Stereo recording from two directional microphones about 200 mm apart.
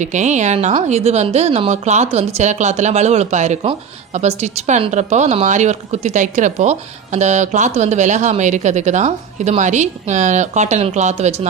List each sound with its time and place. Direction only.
0.0 s a woman's voice: 35° right (ahead or behind)